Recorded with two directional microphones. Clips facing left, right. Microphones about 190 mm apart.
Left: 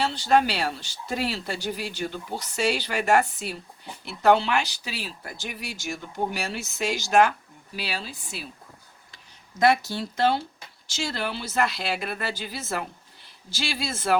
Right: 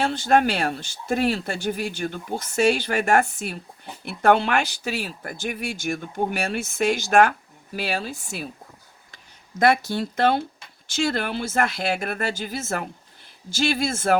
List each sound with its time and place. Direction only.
0.0 s speech: 50° right (ahead or behind)